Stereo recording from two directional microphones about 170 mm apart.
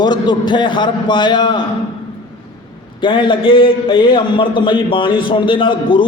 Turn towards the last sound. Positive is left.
turn(degrees=30)  # may be behind; listen again after turning